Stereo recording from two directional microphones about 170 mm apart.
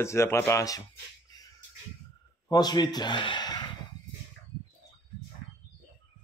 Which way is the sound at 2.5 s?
25° left (ahead or behind).